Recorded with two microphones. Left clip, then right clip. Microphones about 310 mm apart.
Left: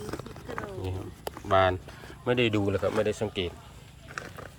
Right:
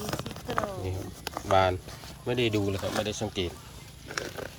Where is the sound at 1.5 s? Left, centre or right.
Centre.